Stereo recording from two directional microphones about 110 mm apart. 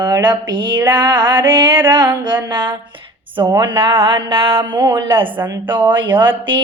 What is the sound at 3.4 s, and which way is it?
Speech, 35° right (ahead or behind).